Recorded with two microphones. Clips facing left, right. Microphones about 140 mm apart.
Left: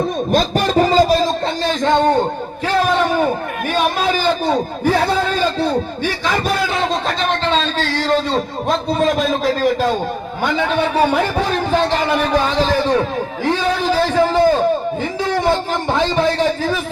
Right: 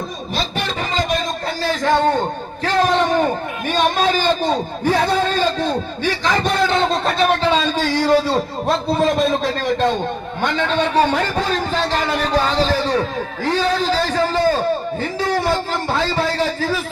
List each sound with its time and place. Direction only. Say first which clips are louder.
0.3 s speech: left 6 dB; 45° left (ahead or behind)
1.6 s a man's voice: left 1 dB; 20° left (ahead or behind)